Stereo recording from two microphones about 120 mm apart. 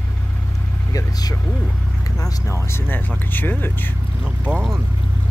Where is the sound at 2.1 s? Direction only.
25° left (ahead or behind).